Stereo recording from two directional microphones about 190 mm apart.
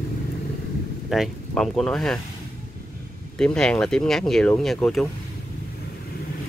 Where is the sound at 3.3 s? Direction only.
5° left (ahead or behind).